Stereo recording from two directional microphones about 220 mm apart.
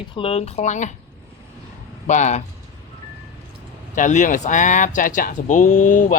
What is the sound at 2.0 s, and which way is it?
Speech, 35° left (ahead or behind).